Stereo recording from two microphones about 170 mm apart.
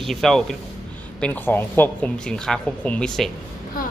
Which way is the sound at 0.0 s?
Centre (ahead or behind).